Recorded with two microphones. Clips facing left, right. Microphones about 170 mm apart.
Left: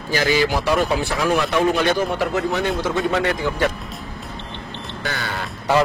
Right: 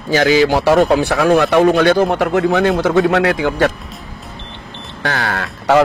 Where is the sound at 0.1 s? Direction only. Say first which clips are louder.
Right 7 dB; 85° right.